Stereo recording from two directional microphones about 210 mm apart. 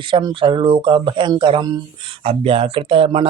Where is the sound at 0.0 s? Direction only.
20° right (ahead or behind).